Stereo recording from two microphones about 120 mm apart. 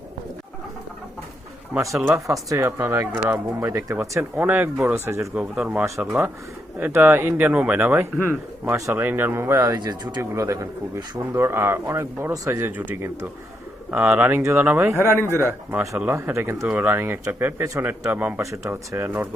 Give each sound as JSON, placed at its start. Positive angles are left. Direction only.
{"t": 2.0, "sound": "speech", "side_deg": -25}
{"t": 4.4, "sound": "speech", "side_deg": -15}
{"t": 5.3, "sound": "speech", "side_deg": -10}
{"t": 9.8, "sound": "speech", "side_deg": -35}
{"t": 11.3, "sound": "speech", "side_deg": -20}
{"t": 14.9, "sound": "a man's voice", "side_deg": 20}
{"t": 15.7, "sound": "speech", "side_deg": -25}
{"t": 18.5, "sound": "speech", "side_deg": -25}